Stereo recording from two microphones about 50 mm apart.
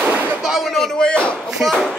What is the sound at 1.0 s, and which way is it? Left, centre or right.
Speech, centre.